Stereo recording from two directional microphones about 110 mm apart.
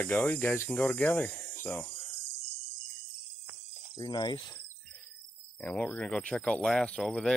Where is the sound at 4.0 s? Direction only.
40° left (ahead or behind).